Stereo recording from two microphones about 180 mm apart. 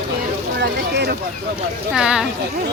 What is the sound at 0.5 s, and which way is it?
Speech, 65° right (ahead or behind).